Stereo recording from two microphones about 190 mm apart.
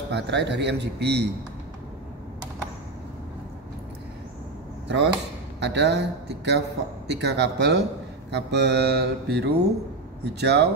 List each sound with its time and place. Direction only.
0.1 s speech: 65° right (ahead or behind)
4.8 s speech: 65° right (ahead or behind)